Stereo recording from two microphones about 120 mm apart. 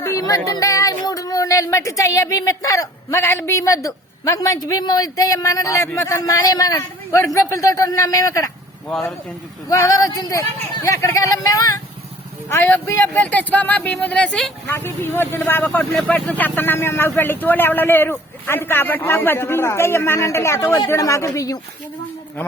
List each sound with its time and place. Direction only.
0.0 s speech: 30° left (ahead or behind)
8.9 s speech: centre (ahead or behind)
9.6 s speech: 30° left (ahead or behind)
12.5 s speech: 20° left (ahead or behind)
14.7 s speech: 20° left (ahead or behind)